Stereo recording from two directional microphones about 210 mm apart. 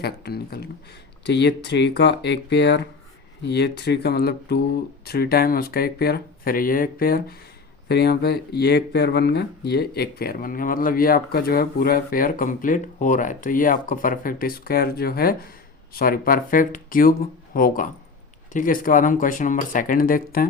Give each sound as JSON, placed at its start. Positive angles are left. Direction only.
{"t": 0.0, "sound": "speech", "side_deg": 50}